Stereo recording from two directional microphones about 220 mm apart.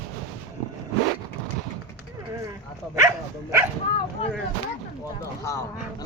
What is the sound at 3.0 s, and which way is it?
Dog, 15° right (ahead or behind).